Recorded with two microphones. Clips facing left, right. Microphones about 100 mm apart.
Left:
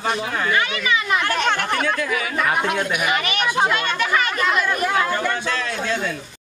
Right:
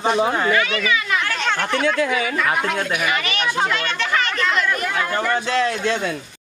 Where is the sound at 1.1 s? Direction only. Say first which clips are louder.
Left 2 dB; 20° left (ahead or behind).